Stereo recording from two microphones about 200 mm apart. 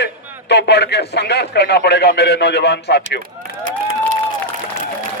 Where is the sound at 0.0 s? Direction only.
55° left (ahead or behind).